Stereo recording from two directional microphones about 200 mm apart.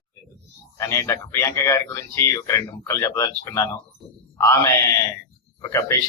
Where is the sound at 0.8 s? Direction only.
15° left (ahead or behind).